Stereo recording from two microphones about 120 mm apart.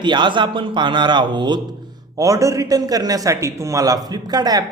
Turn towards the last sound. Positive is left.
turn(degrees=-30)  # may be behind; listen again after turning